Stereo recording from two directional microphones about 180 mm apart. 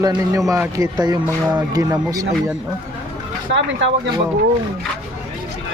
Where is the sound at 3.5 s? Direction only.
85° right.